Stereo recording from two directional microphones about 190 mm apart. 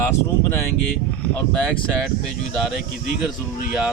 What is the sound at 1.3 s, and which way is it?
Speech, 10° left (ahead or behind).